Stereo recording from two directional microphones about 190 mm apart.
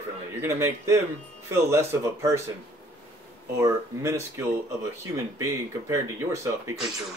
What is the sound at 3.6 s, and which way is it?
Speech, 15° right (ahead or behind).